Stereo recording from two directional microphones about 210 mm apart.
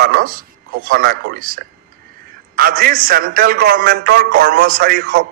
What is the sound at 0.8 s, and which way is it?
A man's voice, 45° right (ahead or behind).